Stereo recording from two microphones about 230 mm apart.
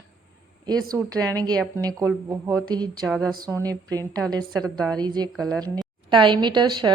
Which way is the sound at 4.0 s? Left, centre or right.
Centre.